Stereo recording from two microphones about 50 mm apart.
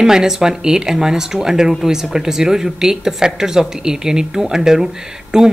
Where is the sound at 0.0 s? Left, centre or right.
Centre.